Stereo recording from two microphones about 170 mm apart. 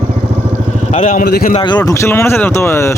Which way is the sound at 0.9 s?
45° left (ahead or behind).